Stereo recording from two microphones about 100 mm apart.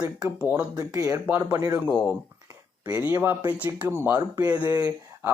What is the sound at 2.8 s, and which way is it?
Speech, 20° right (ahead or behind).